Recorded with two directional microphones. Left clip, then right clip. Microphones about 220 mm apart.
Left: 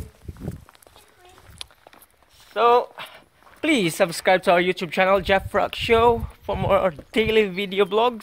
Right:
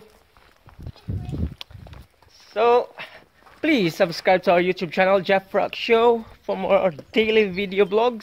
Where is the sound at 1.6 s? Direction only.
20° left (ahead or behind).